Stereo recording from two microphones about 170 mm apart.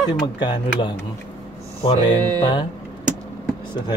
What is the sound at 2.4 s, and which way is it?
Speech, 30° left (ahead or behind).